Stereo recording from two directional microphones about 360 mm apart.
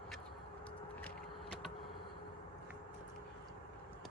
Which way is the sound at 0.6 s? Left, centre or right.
Centre.